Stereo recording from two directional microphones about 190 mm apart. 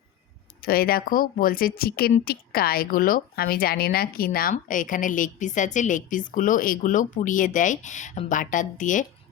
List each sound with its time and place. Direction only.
0.6 s speech: 50° left (ahead or behind)